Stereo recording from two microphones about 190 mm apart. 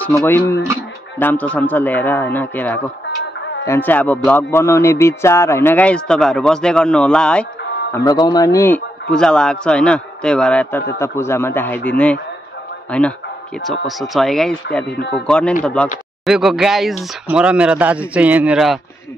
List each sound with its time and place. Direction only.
0.0 s speech: 10° left (ahead or behind)
7.9 s speech: 20° left (ahead or behind); by 18.8 s 5° right (ahead or behind)